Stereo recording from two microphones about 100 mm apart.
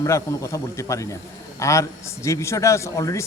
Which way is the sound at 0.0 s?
30° left (ahead or behind).